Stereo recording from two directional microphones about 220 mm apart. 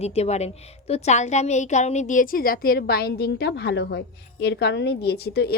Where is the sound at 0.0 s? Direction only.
30° left (ahead or behind).